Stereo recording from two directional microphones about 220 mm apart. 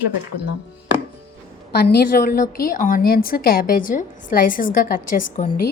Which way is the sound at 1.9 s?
40° left (ahead or behind).